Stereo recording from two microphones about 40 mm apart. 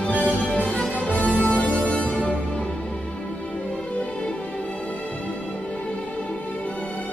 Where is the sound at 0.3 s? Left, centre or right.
Left.